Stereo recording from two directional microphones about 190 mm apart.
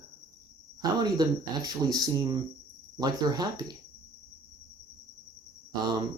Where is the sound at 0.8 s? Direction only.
20° right (ahead or behind).